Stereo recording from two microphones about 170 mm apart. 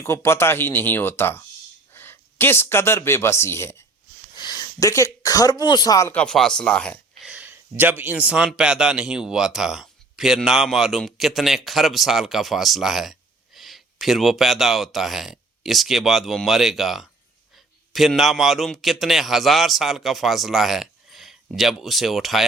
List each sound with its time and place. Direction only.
0.0 s speech: 15° left (ahead or behind)
6.1 s a man's voice: 5° left (ahead or behind)
7.2 s a man's voice: 5° right (ahead or behind)